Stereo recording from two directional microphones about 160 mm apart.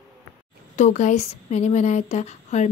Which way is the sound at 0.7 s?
45° left (ahead or behind).